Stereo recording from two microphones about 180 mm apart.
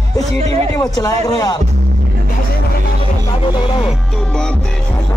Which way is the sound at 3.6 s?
30° left (ahead or behind).